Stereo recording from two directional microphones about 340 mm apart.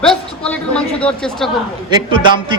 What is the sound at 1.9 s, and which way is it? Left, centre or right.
Speech, centre.